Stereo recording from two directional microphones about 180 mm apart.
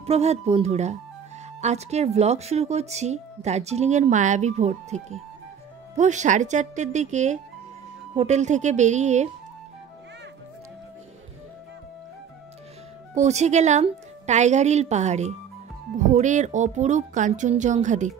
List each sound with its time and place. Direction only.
0.0 s speech: 35° right (ahead or behind)
13.1 s speech: 40° right (ahead or behind)